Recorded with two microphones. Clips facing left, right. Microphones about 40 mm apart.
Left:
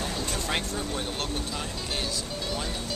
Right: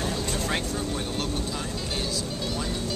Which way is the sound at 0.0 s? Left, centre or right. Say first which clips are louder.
Right 2 dB; centre.